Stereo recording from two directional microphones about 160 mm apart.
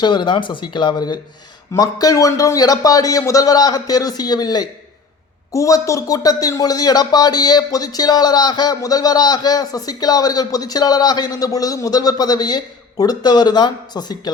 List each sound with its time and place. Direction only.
0.0 s speech: 30° left (ahead or behind)